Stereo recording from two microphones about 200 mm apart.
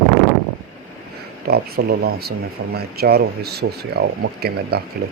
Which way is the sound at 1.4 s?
50° right (ahead or behind).